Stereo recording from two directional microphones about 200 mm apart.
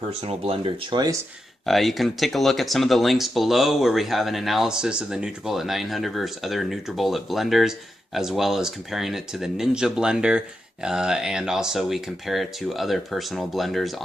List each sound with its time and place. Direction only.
0.2 s speech: 30° right (ahead or behind)
1.6 s speech: centre (ahead or behind)